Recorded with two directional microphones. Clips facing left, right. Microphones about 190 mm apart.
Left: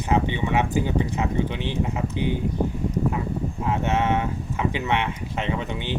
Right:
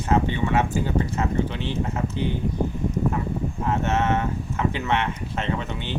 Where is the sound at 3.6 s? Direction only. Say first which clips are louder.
Even; 10° left (ahead or behind).